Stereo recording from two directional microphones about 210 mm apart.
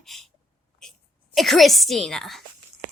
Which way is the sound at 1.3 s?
Centre (ahead or behind).